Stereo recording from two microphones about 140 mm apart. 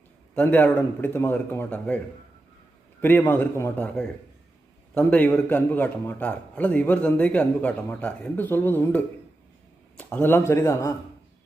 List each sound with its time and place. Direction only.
0.3 s a man's voice: 10° left (ahead or behind)
3.0 s a man's voice: 15° left (ahead or behind)